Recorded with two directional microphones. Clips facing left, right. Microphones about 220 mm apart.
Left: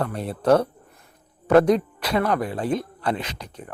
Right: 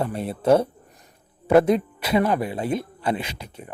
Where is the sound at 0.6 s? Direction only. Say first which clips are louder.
Even; 15° right (ahead or behind).